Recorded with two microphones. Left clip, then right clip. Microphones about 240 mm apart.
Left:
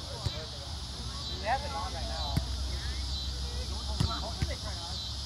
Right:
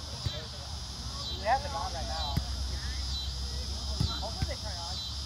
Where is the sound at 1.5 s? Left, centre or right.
Centre.